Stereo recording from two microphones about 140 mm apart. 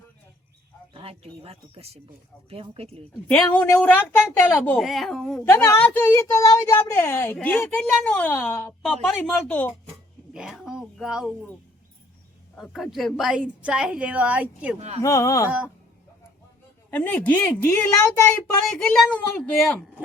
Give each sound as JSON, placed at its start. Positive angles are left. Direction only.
{"t": 0.9, "sound": "speech", "side_deg": -40}
{"t": 3.2, "sound": "a woman's voice", "side_deg": 10}
{"t": 4.8, "sound": "a woman's voice", "side_deg": 0}
{"t": 5.5, "sound": "a woman's voice", "side_deg": 20}
{"t": 10.3, "sound": "a woman's voice", "side_deg": 0}
{"t": 12.5, "sound": "a woman's voice", "side_deg": 0}
{"t": 14.8, "sound": "speech", "side_deg": -50}
{"t": 15.0, "sound": "a woman's voice", "side_deg": 25}
{"t": 16.9, "sound": "a woman's voice", "side_deg": 10}